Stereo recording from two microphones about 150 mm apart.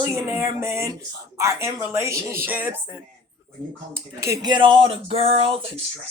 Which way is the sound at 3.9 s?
20° right (ahead or behind).